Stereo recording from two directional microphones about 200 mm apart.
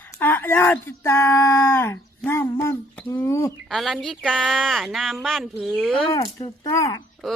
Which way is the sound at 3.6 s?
Centre (ahead or behind).